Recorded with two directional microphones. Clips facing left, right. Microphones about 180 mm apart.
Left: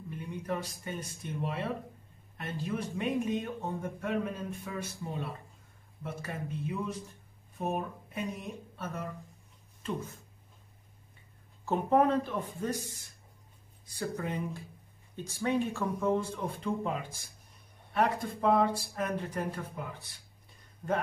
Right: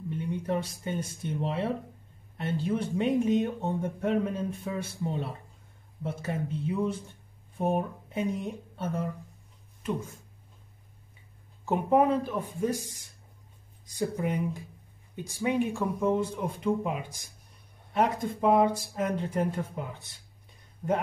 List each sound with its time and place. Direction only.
0.2 s speech: 25° right (ahead or behind)
11.6 s speech: 15° right (ahead or behind)